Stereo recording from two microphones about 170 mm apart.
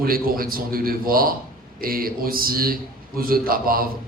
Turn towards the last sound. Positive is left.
turn(degrees=-60)  # may be behind; listen again after turning